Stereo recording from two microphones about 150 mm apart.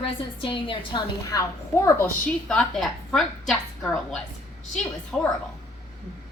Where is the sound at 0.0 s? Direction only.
35° left (ahead or behind).